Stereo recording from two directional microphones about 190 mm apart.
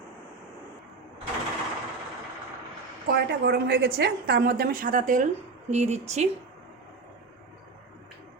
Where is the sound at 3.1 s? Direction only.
60° right (ahead or behind); by 6.2 s 35° right (ahead or behind).